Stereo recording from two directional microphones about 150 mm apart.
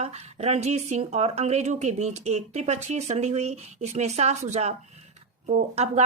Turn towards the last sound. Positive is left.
turn(degrees=-45)  # may be behind; listen again after turning